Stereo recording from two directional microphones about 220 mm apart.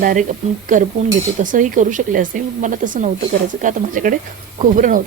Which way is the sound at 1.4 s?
35° right (ahead or behind).